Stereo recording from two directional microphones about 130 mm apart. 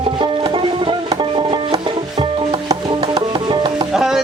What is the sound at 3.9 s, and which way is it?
Music, 5° right (ahead or behind).